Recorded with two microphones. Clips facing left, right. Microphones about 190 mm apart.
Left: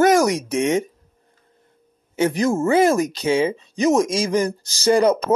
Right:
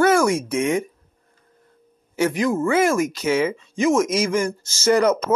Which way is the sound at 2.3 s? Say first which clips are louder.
Left 3 dB; 40° left (ahead or behind).